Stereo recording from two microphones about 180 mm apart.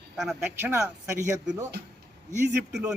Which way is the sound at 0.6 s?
15° right (ahead or behind).